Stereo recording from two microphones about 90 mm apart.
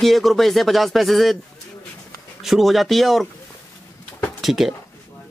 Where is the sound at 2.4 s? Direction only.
Centre (ahead or behind).